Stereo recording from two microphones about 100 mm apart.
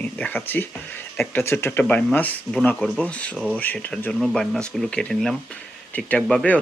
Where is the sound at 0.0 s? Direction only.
15° left (ahead or behind).